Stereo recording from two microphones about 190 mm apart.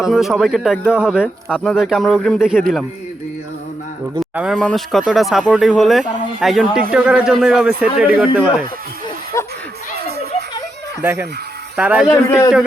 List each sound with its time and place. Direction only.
0.0 s speech: centre (ahead or behind)
4.2 s speech: centre (ahead or behind)
9.3 s a sound: 15° left (ahead or behind)
11.0 s speech: 10° right (ahead or behind)
12.0 s a man's voice: 10° left (ahead or behind)